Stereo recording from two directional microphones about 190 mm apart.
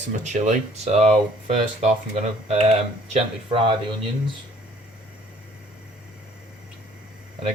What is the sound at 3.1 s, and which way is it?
Speech, 30° right (ahead or behind).